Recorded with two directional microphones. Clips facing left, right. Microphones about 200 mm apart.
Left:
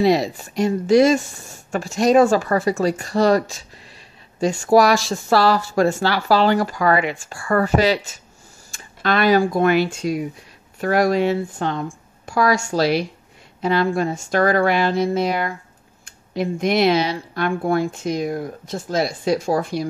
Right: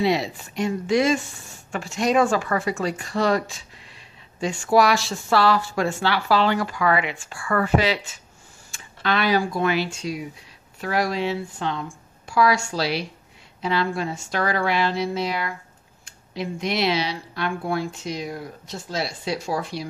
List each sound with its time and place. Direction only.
0.0 s speech: 40° left (ahead or behind)